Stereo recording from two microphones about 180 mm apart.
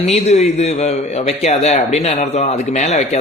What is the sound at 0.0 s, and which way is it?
Speech, 40° left (ahead or behind).